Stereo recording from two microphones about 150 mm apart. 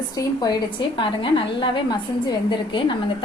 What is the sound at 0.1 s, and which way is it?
A woman's voice, 25° left (ahead or behind).